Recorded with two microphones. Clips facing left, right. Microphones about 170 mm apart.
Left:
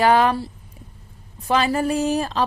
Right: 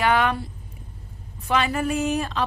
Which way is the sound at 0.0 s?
35° left (ahead or behind).